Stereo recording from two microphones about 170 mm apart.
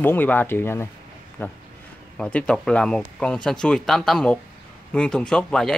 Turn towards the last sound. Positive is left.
turn(degrees=5)  # may be behind; listen again after turning